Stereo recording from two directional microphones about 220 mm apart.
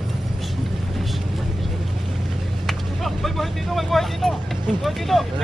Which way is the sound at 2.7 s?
Centre (ahead or behind).